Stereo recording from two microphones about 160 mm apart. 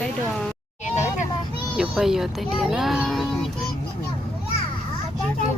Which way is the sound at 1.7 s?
5° right (ahead or behind).